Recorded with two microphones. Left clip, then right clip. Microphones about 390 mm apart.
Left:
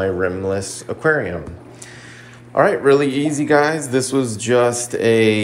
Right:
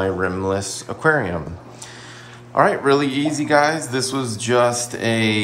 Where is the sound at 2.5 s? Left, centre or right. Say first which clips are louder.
Left 2 dB; centre.